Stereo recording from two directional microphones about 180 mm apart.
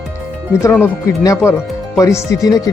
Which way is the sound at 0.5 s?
15° left (ahead or behind).